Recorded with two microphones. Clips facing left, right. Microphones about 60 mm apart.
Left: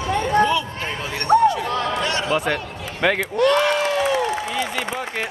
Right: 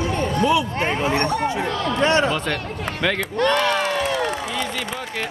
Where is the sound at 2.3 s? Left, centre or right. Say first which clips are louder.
Left 3 dB; centre.